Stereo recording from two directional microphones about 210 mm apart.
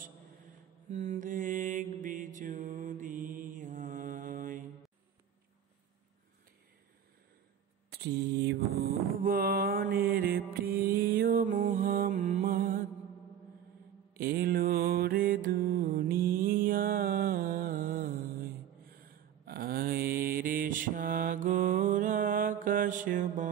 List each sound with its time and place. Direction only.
0.8 s mantra: 35° right (ahead or behind)
7.9 s mantra: 50° right (ahead or behind)
14.1 s mantra: 45° right (ahead or behind)
19.4 s mantra: 45° right (ahead or behind)